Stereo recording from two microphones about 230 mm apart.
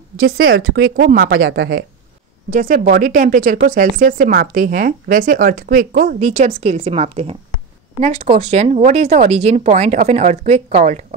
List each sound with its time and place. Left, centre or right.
0.6 s a woman's voice: right
2.5 s speech: right